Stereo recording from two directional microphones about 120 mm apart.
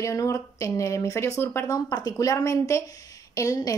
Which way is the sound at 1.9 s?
35° left (ahead or behind).